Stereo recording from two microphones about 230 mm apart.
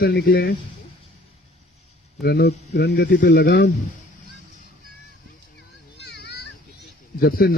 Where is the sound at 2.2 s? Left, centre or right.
Left.